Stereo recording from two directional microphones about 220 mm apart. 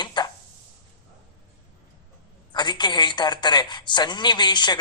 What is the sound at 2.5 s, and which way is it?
A woman's voice, 20° left (ahead or behind).